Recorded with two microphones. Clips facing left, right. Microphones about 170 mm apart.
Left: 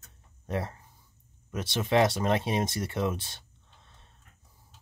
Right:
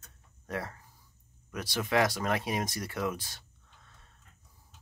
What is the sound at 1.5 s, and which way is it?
Speech, 25° left (ahead or behind).